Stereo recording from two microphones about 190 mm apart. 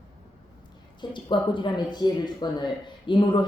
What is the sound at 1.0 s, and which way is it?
Speech, 25° left (ahead or behind).